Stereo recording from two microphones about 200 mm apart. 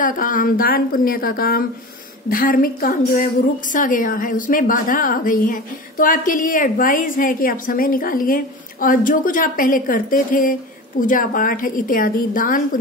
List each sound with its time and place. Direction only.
0.0 s a woman's voice: 40° left (ahead or behind)